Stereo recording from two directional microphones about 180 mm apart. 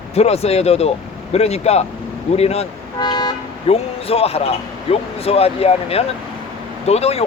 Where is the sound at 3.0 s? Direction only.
25° left (ahead or behind).